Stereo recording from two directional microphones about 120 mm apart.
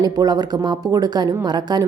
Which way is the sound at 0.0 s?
35° right (ahead or behind).